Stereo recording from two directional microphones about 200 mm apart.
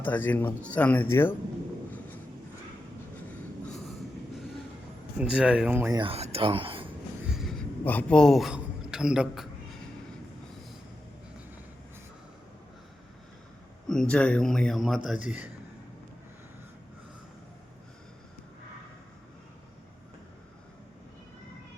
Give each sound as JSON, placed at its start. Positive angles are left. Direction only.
{"t": 0.0, "sound": "speech", "side_deg": 10}
{"t": 5.1, "sound": "a man's voice", "side_deg": -5}
{"t": 6.0, "sound": "speech", "side_deg": -30}
{"t": 7.3, "sound": "a sound", "side_deg": 0}
{"t": 7.9, "sound": "a man's voice", "side_deg": 5}
{"t": 13.8, "sound": "a man's voice", "side_deg": 5}